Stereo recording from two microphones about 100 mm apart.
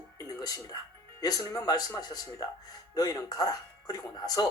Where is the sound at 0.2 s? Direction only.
40° left (ahead or behind).